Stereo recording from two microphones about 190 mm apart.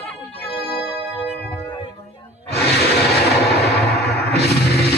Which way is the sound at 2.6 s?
60° left (ahead or behind).